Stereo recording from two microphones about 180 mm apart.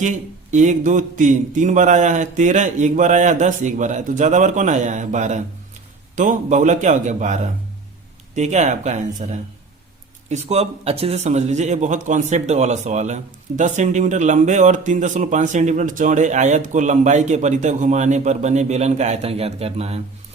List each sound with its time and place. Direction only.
0.0 s speech: 45° right (ahead or behind)